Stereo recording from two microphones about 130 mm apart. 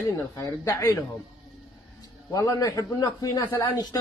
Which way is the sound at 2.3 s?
25° left (ahead or behind).